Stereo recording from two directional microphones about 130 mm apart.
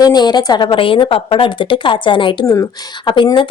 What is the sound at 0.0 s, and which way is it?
A woman's voice, 30° left (ahead or behind).